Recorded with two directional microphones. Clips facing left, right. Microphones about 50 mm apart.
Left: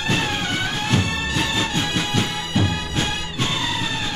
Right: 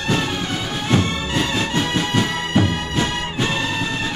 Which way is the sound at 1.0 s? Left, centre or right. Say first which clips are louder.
Right 2 dB; right.